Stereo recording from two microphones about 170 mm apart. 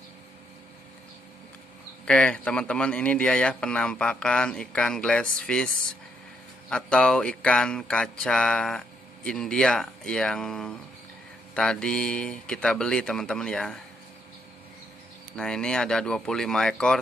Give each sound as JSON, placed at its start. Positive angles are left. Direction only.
{"t": 2.0, "sound": "speech", "side_deg": 5}
{"t": 6.7, "sound": "speech", "side_deg": 5}
{"t": 15.3, "sound": "speech", "side_deg": 5}